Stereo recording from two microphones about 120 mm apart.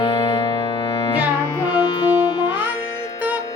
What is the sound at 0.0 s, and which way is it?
Music, 35° left (ahead or behind).